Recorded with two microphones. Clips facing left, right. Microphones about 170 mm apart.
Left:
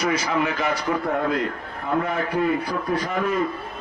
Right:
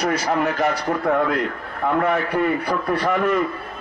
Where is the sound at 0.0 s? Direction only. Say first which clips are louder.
Right 2 dB; 60° right (ahead or behind).